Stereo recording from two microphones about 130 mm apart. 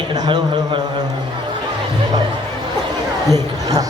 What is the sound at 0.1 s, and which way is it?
Speech, 35° right (ahead or behind).